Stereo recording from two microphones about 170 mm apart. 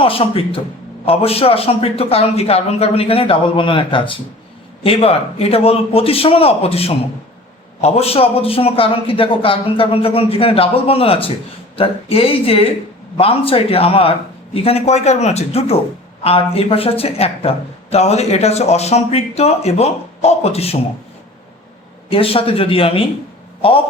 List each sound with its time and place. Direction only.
0.0 s a man's voice: 30° left (ahead or behind)
22.1 s a man's voice: 35° left (ahead or behind)